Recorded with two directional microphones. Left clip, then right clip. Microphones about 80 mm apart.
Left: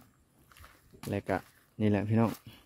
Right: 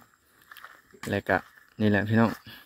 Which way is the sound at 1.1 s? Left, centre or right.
Centre.